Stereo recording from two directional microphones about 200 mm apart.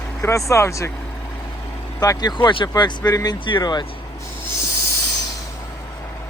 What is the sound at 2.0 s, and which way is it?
Speech, 20° left (ahead or behind).